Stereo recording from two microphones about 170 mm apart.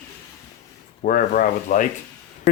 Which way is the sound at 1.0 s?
55° left (ahead or behind).